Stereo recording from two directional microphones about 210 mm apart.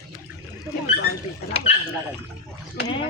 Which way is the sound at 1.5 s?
30° left (ahead or behind).